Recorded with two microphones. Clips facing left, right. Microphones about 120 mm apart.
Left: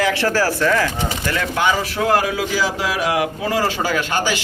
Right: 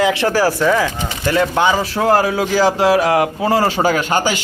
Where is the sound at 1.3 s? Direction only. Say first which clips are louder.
Right 5 dB; 30° right (ahead or behind).